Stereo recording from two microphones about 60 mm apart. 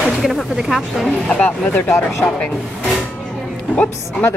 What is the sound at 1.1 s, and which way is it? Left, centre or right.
Speech, centre.